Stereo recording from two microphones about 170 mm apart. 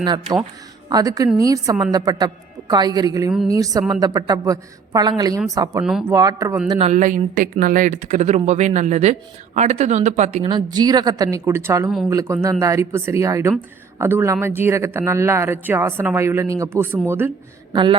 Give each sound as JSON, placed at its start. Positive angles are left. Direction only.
{"t": 0.9, "sound": "a woman's voice", "side_deg": -20}
{"t": 5.8, "sound": "speech", "side_deg": -5}
{"t": 6.1, "sound": "a woman's voice", "side_deg": -20}
{"t": 6.7, "sound": "speech", "side_deg": -35}
{"t": 10.4, "sound": "a woman's voice", "side_deg": -25}